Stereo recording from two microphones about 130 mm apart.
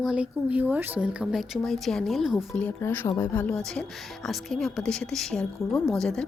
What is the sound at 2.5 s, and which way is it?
Speech, 15° left (ahead or behind).